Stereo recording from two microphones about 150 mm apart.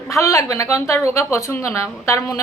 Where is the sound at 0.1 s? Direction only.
20° left (ahead or behind).